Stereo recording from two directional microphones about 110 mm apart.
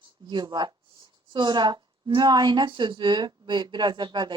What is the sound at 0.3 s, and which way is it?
A woman's voice, 45° right (ahead or behind).